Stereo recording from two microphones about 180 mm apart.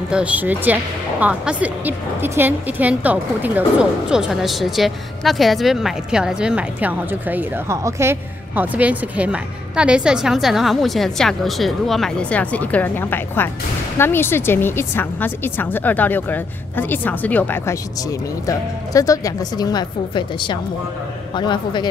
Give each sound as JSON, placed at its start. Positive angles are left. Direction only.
{"t": 0.1, "sound": "a woman's voice", "side_deg": -5}